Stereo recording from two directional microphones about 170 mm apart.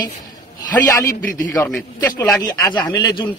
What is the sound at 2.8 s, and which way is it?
Speech, 25° left (ahead or behind).